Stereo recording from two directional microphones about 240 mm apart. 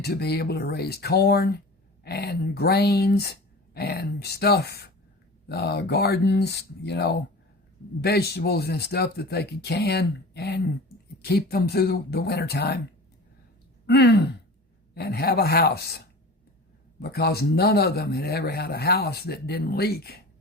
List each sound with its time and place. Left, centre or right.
0.0 s a man's voice: left
13.8 s a man's voice: left